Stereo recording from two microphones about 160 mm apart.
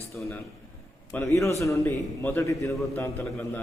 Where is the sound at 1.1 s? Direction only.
20° left (ahead or behind).